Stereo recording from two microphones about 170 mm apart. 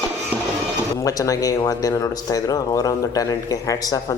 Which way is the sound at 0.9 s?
20° left (ahead or behind).